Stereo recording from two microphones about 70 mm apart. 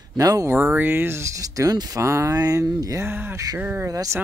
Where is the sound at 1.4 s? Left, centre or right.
Right.